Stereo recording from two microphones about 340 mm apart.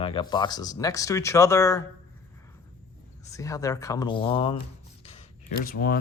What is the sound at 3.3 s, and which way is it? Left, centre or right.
Speech, centre.